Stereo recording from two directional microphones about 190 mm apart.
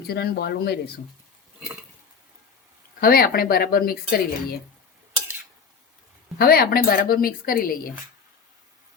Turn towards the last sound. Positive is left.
turn(degrees=50)  # may be behind; listen again after turning